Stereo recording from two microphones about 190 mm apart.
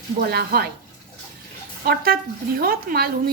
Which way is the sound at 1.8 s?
50° right (ahead or behind).